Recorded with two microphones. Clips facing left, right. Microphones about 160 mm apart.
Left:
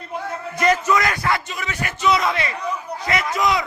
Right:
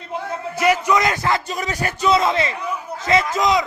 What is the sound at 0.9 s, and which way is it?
Speech, 20° right (ahead or behind).